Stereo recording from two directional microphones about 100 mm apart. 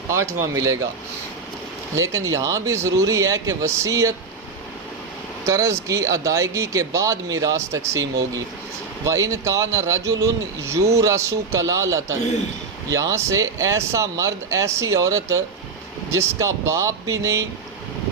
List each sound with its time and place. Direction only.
0.1 s speech: 30° right (ahead or behind)
2.0 s speech: 35° right (ahead or behind)
5.5 s speech: 30° right (ahead or behind)
9.0 s speech: 30° right (ahead or behind)